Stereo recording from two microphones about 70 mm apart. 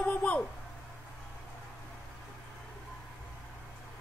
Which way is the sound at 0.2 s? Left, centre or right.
Centre.